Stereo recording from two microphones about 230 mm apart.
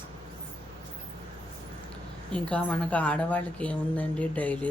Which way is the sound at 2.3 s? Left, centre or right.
Centre.